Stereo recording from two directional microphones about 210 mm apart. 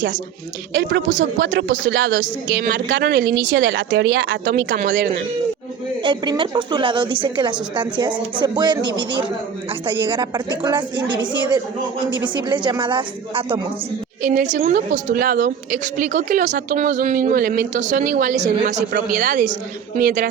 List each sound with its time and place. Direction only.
0.7 s speech: 60° right (ahead or behind)
4.9 s speech: 50° right (ahead or behind)
6.0 s speech: 20° right (ahead or behind)
9.8 s speech: 25° right (ahead or behind)
14.2 s a woman's voice: 40° right (ahead or behind)